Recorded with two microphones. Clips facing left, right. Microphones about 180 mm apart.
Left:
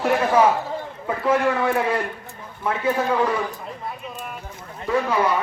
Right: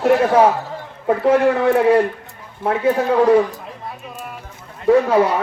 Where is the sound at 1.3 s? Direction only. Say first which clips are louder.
Right 5 dB; 70° right (ahead or behind).